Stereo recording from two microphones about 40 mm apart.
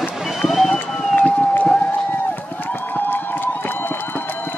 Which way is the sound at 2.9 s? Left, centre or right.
Left.